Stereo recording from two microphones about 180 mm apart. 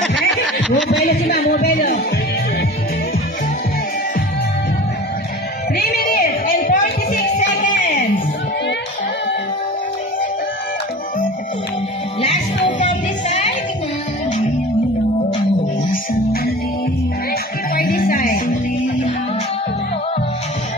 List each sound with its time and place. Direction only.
1.0 s music: 65° left (ahead or behind)
5.8 s music: 60° left (ahead or behind); by 8.0 s 40° left (ahead or behind)
15.9 s music: 55° left (ahead or behind)
17.7 s music: 55° left (ahead or behind)